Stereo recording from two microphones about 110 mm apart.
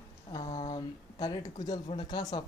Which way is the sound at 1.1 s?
35° left (ahead or behind).